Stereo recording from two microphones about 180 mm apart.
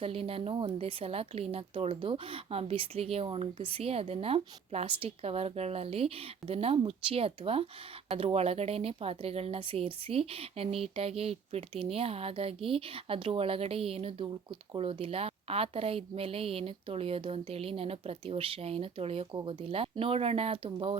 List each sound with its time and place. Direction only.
0.0 s a woman's voice: 30° right (ahead or behind)